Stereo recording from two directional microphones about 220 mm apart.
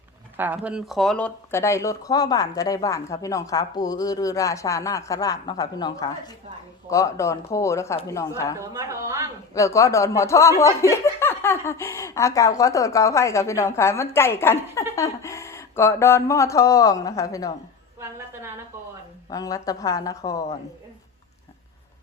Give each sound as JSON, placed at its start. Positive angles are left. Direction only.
{"t": 0.3, "sound": "speech", "side_deg": -10}
{"t": 8.5, "sound": "a woman's voice", "side_deg": -15}
{"t": 9.6, "sound": "speech", "side_deg": 15}
{"t": 19.3, "sound": "speech", "side_deg": 15}